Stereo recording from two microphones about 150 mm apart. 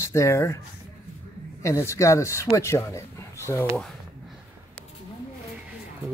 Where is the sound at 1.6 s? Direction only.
20° left (ahead or behind).